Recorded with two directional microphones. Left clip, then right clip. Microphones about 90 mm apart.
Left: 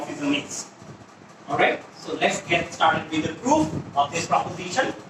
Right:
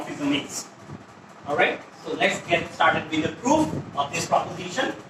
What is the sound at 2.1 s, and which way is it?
Speech, 35° left (ahead or behind).